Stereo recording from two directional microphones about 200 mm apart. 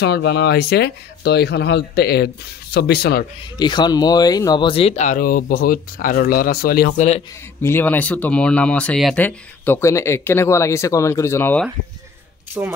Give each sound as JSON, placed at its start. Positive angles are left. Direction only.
{"t": 0.0, "sound": "speech", "side_deg": 55}
{"t": 3.5, "sound": "speech", "side_deg": 20}
{"t": 7.6, "sound": "speech", "side_deg": 10}
{"t": 12.6, "sound": "speech", "side_deg": -5}